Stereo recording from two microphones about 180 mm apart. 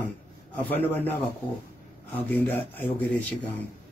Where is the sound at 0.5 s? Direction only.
10° left (ahead or behind).